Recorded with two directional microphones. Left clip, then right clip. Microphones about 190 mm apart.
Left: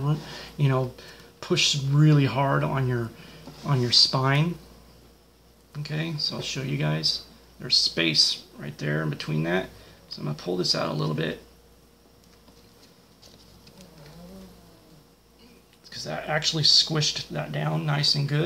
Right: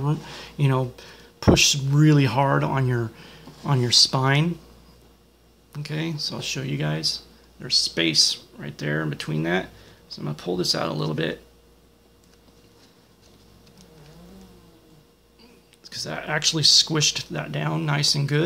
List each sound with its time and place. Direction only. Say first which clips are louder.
0.0 s speech: right 2 dB; 30° right (ahead or behind)
5.7 s speech: right 2 dB; 30° right (ahead or behind)
15.8 s speech: right 2 dB; 35° right (ahead or behind)